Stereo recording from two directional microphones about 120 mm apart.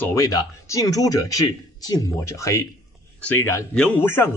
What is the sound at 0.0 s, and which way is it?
Speech, 25° left (ahead or behind).